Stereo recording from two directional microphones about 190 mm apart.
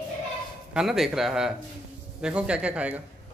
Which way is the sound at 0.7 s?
Centre (ahead or behind).